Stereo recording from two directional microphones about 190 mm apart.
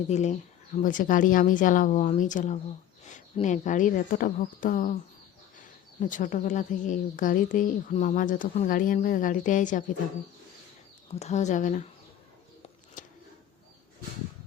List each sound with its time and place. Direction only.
0.1 s speech: 40° left (ahead or behind)
6.0 s speech: 40° left (ahead or behind)
11.1 s speech: 35° left (ahead or behind)
13.0 s a sound: 40° left (ahead or behind)